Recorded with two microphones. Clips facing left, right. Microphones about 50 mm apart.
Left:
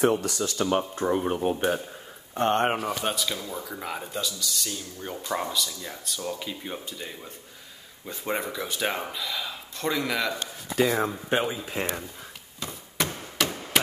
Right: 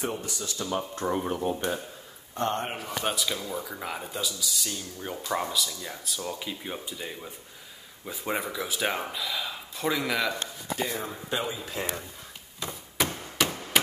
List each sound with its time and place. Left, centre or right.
0.0 s speech: left
0.9 s speech: centre
1.3 s speech: left
2.6 s speech: left
3.0 s speech: centre
11.3 s speech: left
11.8 s speech: left
12.5 s a sound: centre